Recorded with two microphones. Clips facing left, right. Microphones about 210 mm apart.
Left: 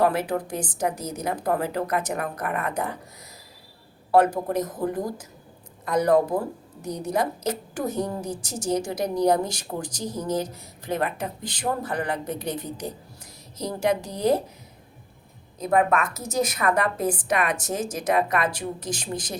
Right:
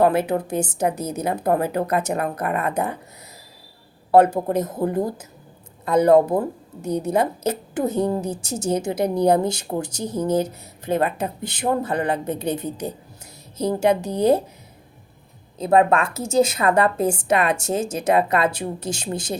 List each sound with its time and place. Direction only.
0.0 s speech: 25° right (ahead or behind)
4.1 s speech: 25° right (ahead or behind)
15.5 s speech: 30° right (ahead or behind)